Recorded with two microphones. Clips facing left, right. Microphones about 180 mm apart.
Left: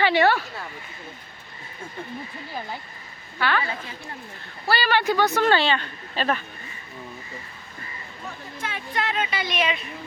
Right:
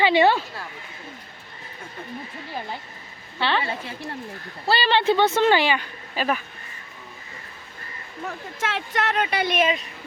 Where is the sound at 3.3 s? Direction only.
25° right (ahead or behind); by 6.4 s 5° right (ahead or behind).